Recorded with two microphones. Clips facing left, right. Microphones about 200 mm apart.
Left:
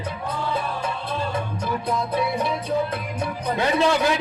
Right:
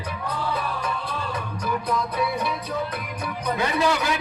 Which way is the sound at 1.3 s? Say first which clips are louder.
Left 2 dB; 25° left (ahead or behind).